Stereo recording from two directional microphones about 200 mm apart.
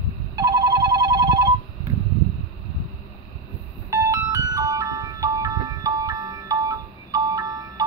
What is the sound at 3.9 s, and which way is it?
Music, 15° right (ahead or behind).